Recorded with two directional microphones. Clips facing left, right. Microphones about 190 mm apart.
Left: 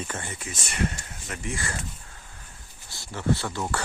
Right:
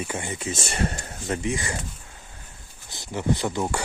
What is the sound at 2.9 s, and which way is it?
Speech, 15° right (ahead or behind).